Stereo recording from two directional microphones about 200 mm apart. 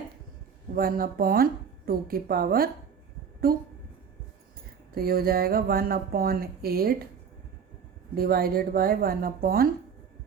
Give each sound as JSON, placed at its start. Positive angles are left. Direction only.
{"t": 0.8, "sound": "speech", "side_deg": -45}
{"t": 4.9, "sound": "speech", "side_deg": -50}
{"t": 8.1, "sound": "speech", "side_deg": -50}